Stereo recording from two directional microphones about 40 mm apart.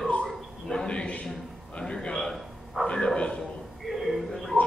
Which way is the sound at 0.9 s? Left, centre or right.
Left.